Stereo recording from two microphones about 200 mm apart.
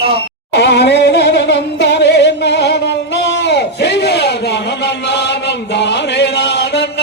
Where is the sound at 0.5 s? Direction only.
55° left (ahead or behind).